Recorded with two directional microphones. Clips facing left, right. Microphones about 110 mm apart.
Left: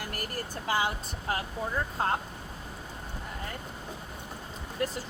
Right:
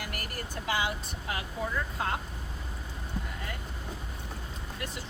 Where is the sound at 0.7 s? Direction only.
40° left (ahead or behind).